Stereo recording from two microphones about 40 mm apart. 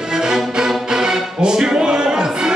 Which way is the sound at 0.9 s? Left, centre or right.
Centre.